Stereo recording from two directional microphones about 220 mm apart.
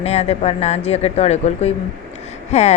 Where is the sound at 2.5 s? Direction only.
30° left (ahead or behind).